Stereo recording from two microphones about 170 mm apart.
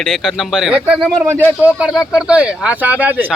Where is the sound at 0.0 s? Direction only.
Centre (ahead or behind).